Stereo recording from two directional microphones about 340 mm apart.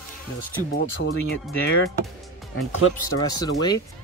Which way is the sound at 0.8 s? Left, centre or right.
Left.